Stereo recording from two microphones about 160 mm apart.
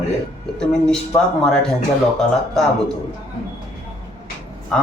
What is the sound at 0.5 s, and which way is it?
Speech, 5° left (ahead or behind).